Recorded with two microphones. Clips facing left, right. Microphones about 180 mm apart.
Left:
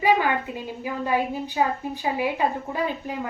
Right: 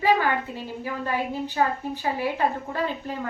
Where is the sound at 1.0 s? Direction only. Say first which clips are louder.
Left 4 dB; 15° left (ahead or behind).